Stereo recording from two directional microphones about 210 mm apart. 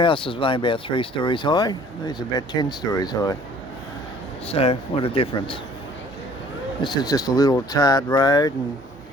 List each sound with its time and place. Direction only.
0.0 s speech: 25° left (ahead or behind)
4.4 s speech: 30° left (ahead or behind)
6.8 s speech: 20° left (ahead or behind)